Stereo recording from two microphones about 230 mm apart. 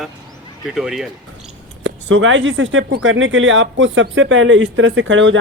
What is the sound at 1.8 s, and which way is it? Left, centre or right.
Speech, right.